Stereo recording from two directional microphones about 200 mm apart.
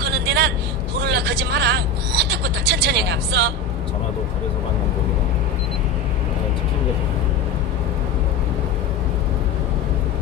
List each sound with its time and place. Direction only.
0.0 s vehicle: 55° right (ahead or behind)